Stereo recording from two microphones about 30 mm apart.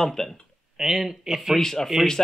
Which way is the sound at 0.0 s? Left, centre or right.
Centre.